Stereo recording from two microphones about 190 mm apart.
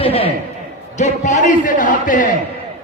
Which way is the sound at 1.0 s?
40° left (ahead or behind).